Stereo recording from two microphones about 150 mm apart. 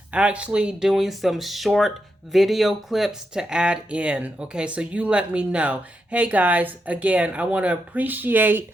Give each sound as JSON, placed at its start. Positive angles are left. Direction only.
{"t": 0.1, "sound": "speech", "side_deg": -5}